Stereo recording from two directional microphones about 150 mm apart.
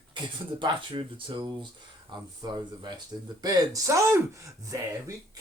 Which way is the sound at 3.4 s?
25° right (ahead or behind).